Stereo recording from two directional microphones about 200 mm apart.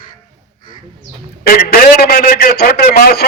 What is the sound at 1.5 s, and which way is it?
A man's voice, 45° left (ahead or behind).